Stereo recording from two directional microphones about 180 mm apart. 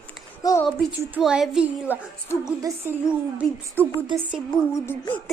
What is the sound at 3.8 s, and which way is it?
Music, 10° right (ahead or behind).